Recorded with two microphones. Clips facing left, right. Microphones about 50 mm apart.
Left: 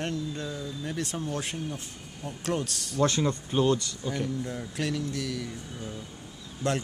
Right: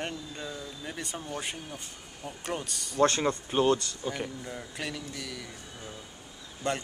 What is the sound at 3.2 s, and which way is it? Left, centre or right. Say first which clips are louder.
Speech: even; centre.